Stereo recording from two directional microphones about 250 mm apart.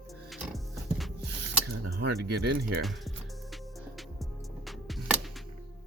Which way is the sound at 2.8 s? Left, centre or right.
Centre.